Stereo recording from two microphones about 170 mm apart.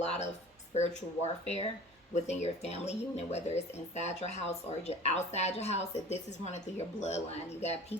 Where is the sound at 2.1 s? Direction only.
40° left (ahead or behind).